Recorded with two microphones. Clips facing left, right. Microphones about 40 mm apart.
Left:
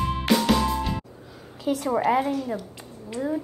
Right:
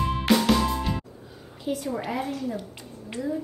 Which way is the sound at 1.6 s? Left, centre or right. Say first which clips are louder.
Left 4 dB; left.